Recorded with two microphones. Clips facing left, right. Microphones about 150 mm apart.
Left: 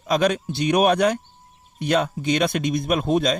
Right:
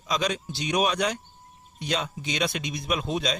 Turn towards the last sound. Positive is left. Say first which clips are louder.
# left 7 dB
turn(degrees=50)  # may be behind; listen again after turning